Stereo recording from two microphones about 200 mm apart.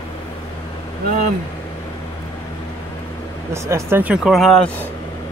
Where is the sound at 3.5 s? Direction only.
15° right (ahead or behind); by 4.8 s 5° left (ahead or behind).